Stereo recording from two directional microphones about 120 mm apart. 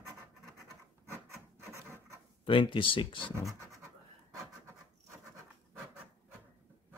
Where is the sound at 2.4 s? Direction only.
45° left (ahead or behind).